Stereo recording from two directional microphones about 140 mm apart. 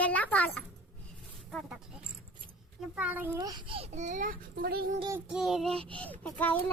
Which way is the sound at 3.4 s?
25° right (ahead or behind).